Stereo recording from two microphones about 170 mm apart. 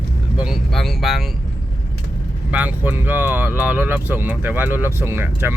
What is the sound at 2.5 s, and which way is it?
Speech, 10° right (ahead or behind).